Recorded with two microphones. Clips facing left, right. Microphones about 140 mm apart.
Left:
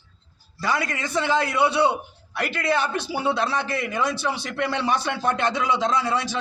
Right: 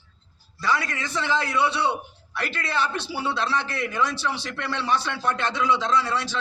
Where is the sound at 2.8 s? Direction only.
50° left (ahead or behind).